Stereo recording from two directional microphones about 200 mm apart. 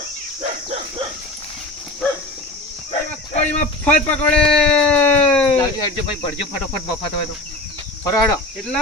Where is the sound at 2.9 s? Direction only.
35° left (ahead or behind).